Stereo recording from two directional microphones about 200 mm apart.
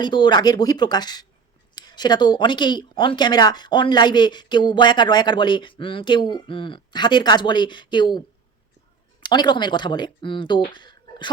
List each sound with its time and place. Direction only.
0.0 s speech: 25° left (ahead or behind)
9.2 s speech: 20° left (ahead or behind)
10.7 s a sound: 25° left (ahead or behind)